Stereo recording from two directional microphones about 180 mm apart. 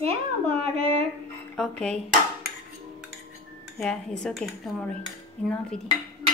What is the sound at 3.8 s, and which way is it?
Speech, 5° left (ahead or behind).